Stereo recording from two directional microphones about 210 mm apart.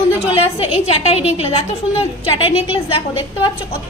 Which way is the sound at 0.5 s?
25° left (ahead or behind).